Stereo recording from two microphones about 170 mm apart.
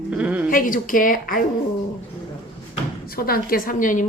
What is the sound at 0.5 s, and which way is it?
Speech, 55° left (ahead or behind).